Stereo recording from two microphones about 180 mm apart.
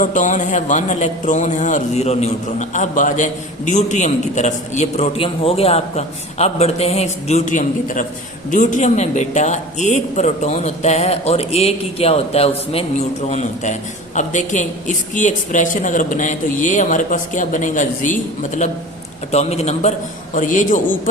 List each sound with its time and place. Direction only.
0.0 s a man's voice: 45° left (ahead or behind)